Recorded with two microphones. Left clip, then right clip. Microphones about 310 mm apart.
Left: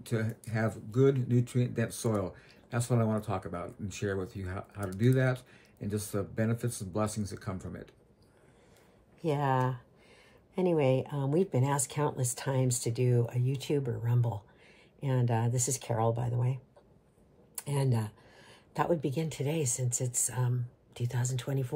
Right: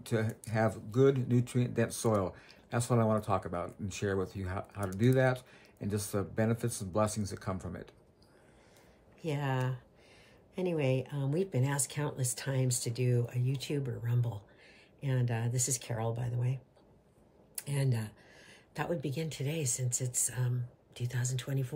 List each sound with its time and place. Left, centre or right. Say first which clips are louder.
0.0 s speech: right 1 dB; centre
9.2 s speech: left 6 dB; centre
17.6 s speech: left 4 dB; centre